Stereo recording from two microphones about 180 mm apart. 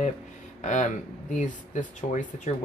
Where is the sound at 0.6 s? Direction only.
45° left (ahead or behind).